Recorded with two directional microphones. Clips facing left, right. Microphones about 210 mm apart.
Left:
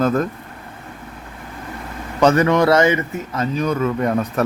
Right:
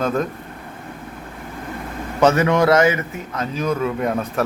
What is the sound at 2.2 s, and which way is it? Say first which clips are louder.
A man's voice: left 1 dB; 5° right (ahead or behind).